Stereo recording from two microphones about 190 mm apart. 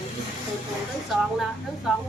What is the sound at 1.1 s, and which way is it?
Speech, centre (ahead or behind).